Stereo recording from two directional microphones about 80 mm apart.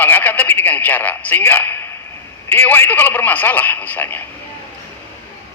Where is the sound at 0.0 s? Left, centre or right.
Left.